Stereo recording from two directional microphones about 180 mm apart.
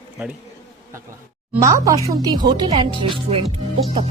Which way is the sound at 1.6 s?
15° right (ahead or behind).